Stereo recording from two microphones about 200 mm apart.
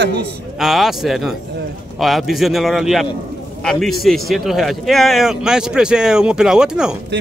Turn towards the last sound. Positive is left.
turn(degrees=-5)  # may be behind; listen again after turning